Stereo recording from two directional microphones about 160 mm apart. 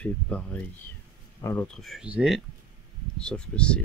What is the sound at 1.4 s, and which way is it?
Speech, 15° left (ahead or behind).